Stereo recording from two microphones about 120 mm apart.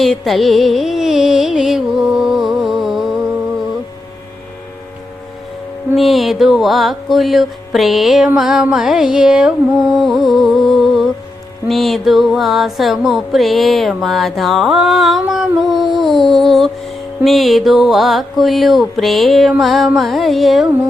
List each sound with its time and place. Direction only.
0.0 s music: centre (ahead or behind)
5.9 s music: centre (ahead or behind)